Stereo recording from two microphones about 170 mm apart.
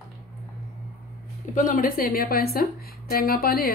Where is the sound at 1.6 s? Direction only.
55° left (ahead or behind).